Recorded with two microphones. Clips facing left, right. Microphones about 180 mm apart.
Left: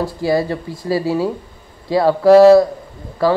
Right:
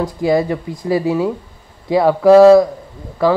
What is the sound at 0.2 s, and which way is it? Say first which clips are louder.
Speech: right 3 dB; 20° right (ahead or behind).